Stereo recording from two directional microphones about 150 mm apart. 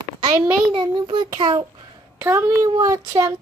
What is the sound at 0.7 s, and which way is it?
Speech, 30° right (ahead or behind).